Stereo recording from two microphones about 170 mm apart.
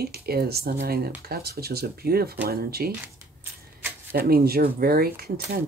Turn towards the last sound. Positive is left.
turn(degrees=-60)  # may be behind; listen again after turning